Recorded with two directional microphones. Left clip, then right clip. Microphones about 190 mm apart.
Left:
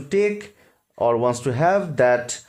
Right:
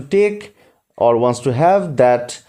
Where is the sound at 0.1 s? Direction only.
25° right (ahead or behind).